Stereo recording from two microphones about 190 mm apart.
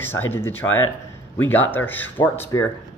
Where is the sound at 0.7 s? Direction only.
90° left.